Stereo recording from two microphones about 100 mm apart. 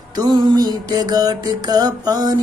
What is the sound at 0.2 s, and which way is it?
Music, 45° right (ahead or behind).